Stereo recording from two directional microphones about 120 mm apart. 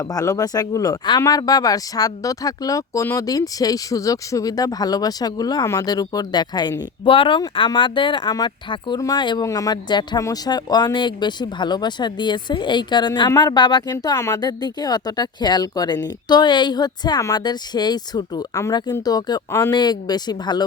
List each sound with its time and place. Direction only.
0.1 s speech: 30° left (ahead or behind)
19.5 s speech: 20° left (ahead or behind)
19.7 s speech: 35° left (ahead or behind)